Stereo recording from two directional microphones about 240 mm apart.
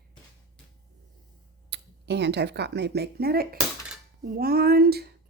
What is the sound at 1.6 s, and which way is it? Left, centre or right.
Speech, right.